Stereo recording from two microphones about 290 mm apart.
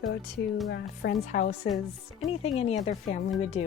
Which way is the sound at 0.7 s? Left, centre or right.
Left.